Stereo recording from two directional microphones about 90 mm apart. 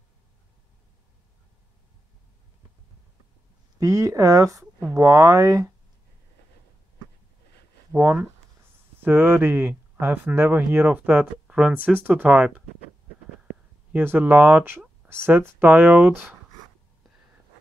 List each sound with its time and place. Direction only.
3.7 s speech: 35° right (ahead or behind)
7.9 s speech: 25° right (ahead or behind)
11.4 s speech: 10° right (ahead or behind)
13.9 s speech: 20° right (ahead or behind)